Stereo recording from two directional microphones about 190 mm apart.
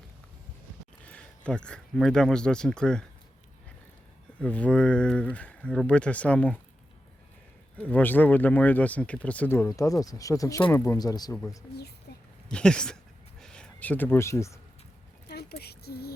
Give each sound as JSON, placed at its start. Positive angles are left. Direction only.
{"t": 1.0, "sound": "speech", "side_deg": 5}
{"t": 4.4, "sound": "speech", "side_deg": 5}
{"t": 7.8, "sound": "speech", "side_deg": 10}
{"t": 12.1, "sound": "a sound", "side_deg": 55}
{"t": 12.5, "sound": "speech", "side_deg": 5}
{"t": 15.3, "sound": "a sound", "side_deg": 60}